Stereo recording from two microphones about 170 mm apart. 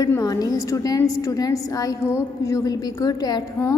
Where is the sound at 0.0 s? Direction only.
20° left (ahead or behind).